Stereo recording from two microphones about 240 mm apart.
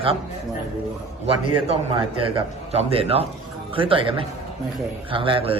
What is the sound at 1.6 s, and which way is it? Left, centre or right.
A man's voice, right.